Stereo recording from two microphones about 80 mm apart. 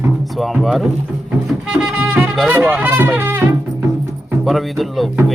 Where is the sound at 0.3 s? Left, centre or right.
Centre.